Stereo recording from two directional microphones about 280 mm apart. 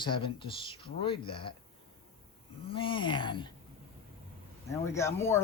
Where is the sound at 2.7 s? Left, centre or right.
Centre.